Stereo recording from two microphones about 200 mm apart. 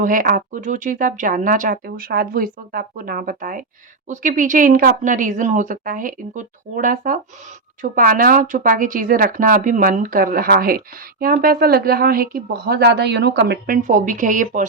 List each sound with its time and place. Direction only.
0.0 s speech: 40° right (ahead or behind)
13.8 s speech: 40° right (ahead or behind)